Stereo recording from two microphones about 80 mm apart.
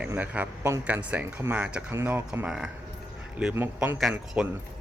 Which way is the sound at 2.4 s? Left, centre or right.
Centre.